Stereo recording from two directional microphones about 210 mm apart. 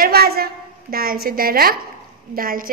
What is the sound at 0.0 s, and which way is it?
A woman's voice, 50° right (ahead or behind).